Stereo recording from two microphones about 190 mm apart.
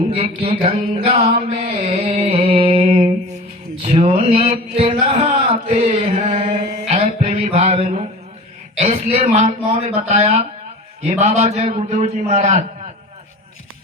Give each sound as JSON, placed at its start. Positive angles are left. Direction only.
{"t": 0.1, "sound": "mantra", "side_deg": -30}
{"t": 3.8, "sound": "a sound", "side_deg": -30}
{"t": 7.0, "sound": "music", "side_deg": -50}
{"t": 7.4, "sound": "a sound", "side_deg": -35}
{"t": 8.8, "sound": "a man's voice", "side_deg": -30}
{"t": 9.2, "sound": "mantra", "side_deg": -35}